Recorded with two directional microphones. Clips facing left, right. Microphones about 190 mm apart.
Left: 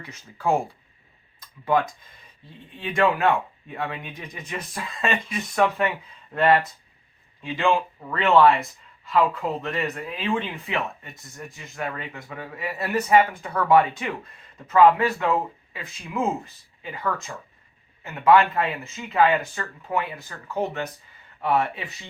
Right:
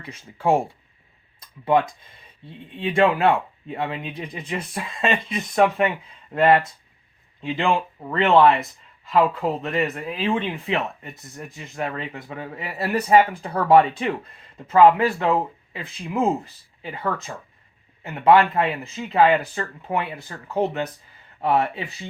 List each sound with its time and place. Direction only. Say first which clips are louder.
0.0 s speech: right 3 dB; 30° right (ahead or behind)
2.8 s speech: right 3 dB; 30° right (ahead or behind)